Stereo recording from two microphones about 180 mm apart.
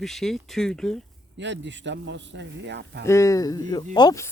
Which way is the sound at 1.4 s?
80° right.